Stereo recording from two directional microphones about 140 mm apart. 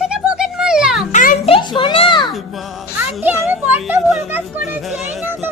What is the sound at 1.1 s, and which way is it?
Music, 75° left (ahead or behind).